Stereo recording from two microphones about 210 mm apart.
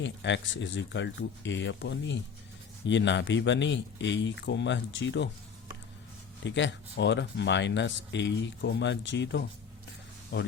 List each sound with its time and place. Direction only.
0.0 s speech: 60° left (ahead or behind)
6.4 s speech: 60° left (ahead or behind)